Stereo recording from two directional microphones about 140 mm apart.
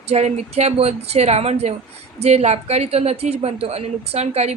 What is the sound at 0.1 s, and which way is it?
A woman's voice, 50° right (ahead or behind).